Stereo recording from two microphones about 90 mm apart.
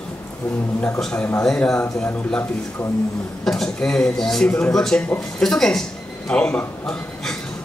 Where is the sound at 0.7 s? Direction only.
25° left (ahead or behind).